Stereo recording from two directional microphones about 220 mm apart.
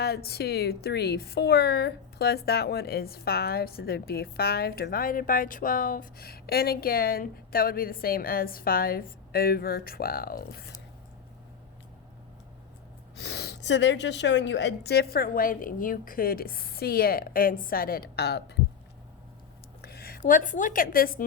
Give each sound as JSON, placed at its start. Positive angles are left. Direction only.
{"t": 0.0, "sound": "speech", "side_deg": 45}
{"t": 13.1, "sound": "speech", "side_deg": 50}
{"t": 19.8, "sound": "speech", "side_deg": 45}